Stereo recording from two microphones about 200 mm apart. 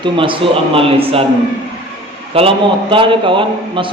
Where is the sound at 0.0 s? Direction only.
25° right (ahead or behind).